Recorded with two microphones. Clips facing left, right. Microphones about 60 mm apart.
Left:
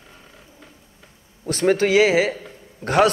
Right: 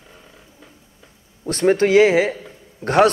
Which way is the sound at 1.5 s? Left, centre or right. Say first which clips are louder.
Right 3 dB; right.